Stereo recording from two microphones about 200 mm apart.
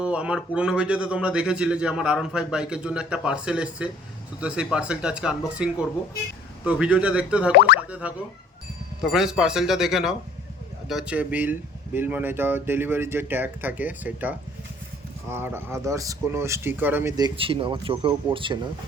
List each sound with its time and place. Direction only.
0.0 s a man's voice: 5° right (ahead or behind); by 18.7 s 25° right (ahead or behind)